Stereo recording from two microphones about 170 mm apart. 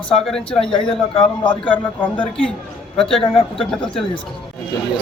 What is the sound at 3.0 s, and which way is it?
A man's voice, 5° left (ahead or behind).